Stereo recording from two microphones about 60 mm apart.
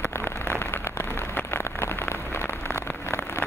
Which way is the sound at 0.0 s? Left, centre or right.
Left.